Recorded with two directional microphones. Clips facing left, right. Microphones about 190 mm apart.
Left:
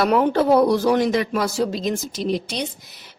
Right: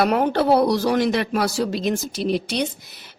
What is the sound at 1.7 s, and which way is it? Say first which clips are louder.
Speech: right 1 dB; 65° right (ahead or behind).